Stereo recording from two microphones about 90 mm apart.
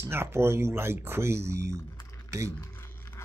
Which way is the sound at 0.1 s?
25° right (ahead or behind).